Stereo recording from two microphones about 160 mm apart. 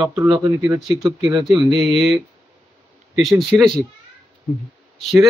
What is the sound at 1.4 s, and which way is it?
Speech, centre (ahead or behind).